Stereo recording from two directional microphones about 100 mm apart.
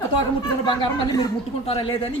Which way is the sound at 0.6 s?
55° left (ahead or behind).